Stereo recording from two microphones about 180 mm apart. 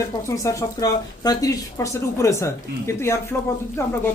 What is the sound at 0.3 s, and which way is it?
Speech, 20° left (ahead or behind).